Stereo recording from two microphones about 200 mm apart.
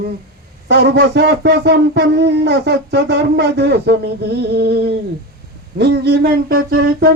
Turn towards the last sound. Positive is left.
turn(degrees=-55)  # may be behind; listen again after turning